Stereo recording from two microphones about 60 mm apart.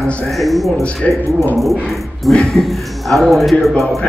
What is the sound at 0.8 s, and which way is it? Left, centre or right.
Speech, left.